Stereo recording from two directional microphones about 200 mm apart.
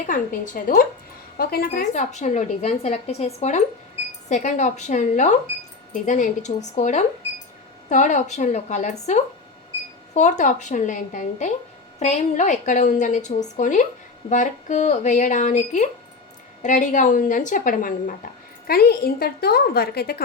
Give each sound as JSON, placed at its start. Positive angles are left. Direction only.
{"t": 0.1, "sound": "a woman's voice", "side_deg": 40}
{"t": 10.2, "sound": "a woman's voice", "side_deg": 35}